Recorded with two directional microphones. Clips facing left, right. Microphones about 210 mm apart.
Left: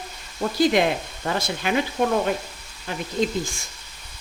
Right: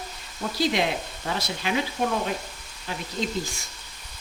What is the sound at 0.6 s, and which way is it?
Speech, 55° left (ahead or behind).